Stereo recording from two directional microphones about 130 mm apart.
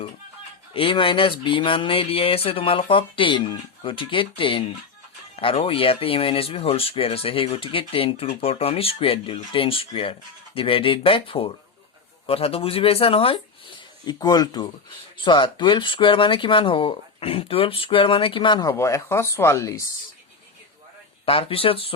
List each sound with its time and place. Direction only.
0.7 s speech: 45° left (ahead or behind)
14.0 s speech: 30° left (ahead or behind)
18.7 s speech: 20° left (ahead or behind)
21.2 s speech: 45° left (ahead or behind)